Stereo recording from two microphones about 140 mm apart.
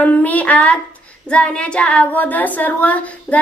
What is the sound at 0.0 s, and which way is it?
A woman's voice, 10° left (ahead or behind).